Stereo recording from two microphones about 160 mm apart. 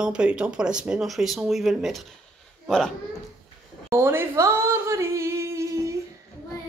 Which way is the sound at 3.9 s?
15° right (ahead or behind).